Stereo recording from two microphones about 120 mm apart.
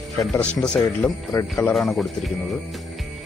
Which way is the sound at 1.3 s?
25° left (ahead or behind).